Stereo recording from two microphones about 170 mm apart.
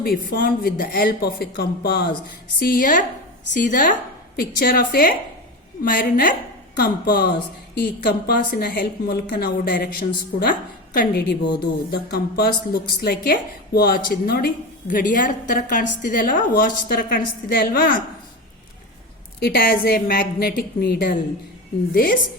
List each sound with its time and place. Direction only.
0.0 s a woman's voice: 60° left (ahead or behind)
19.4 s a woman's voice: 65° left (ahead or behind)